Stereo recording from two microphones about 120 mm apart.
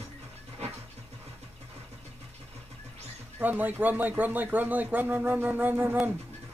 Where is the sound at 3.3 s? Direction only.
15° right (ahead or behind).